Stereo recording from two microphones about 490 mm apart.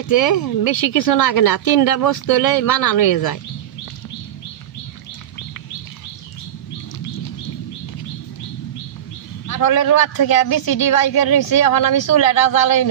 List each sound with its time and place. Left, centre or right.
0.0 s a woman's voice: left
9.5 s a woman's voice: left